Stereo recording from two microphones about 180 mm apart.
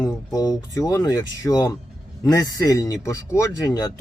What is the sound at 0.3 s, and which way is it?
Speech, 20° left (ahead or behind).